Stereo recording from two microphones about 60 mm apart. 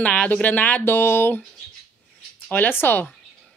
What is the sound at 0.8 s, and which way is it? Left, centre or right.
Speech, left.